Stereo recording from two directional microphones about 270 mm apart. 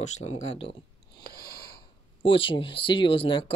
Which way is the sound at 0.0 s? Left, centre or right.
Left.